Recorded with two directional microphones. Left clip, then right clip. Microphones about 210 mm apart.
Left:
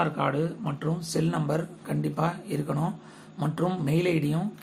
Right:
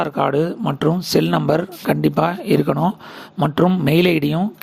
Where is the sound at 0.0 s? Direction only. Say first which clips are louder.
Right 9 dB; 50° right (ahead or behind).